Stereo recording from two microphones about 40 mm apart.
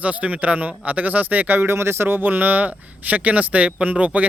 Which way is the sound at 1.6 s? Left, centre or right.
Right.